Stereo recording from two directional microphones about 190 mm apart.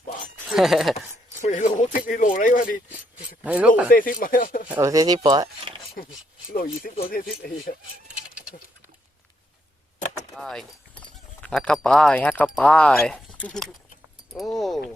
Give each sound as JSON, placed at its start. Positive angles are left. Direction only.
{"t": 0.5, "sound": "speech", "side_deg": 0}
{"t": 1.4, "sound": "speech", "side_deg": 40}
{"t": 3.4, "sound": "speech", "side_deg": -10}
{"t": 3.8, "sound": "speech", "side_deg": 50}
{"t": 4.7, "sound": "speech", "side_deg": -15}
{"t": 6.5, "sound": "speech", "side_deg": 50}
{"t": 10.3, "sound": "speech", "side_deg": 0}